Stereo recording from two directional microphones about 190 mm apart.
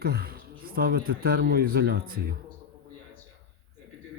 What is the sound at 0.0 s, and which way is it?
A man's voice, 55° right (ahead or behind).